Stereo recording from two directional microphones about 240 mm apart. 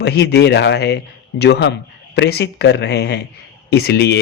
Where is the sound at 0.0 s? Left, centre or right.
Left.